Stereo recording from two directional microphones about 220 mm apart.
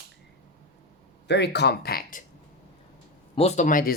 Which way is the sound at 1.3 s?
50° left (ahead or behind).